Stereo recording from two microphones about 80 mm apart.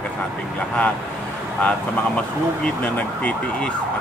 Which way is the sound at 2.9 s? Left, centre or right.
Centre.